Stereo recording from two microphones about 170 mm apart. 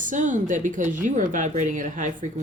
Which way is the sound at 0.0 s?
50° right (ahead or behind).